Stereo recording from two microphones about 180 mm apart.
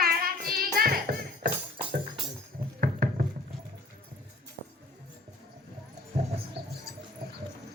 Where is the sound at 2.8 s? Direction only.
55° right (ahead or behind).